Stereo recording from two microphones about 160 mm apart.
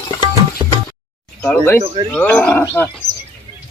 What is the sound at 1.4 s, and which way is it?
Speech, 10° left (ahead or behind).